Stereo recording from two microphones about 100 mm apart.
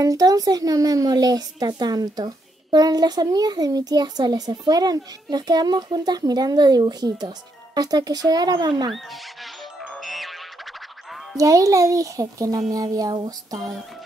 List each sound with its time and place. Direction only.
0.0 s speech: 40° right (ahead or behind)
8.9 s music: centre (ahead or behind)
11.3 s speech: 35° right (ahead or behind)